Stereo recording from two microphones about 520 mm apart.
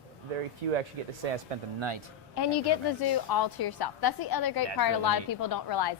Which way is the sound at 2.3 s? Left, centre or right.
Left.